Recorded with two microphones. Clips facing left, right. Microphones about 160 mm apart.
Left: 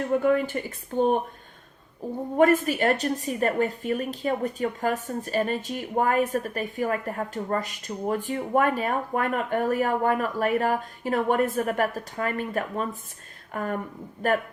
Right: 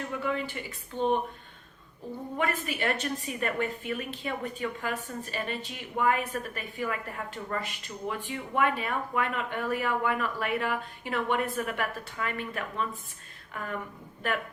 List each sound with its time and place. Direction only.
0.1 s speech: 45° left (ahead or behind)
2.3 s a woman's voice: 45° left (ahead or behind)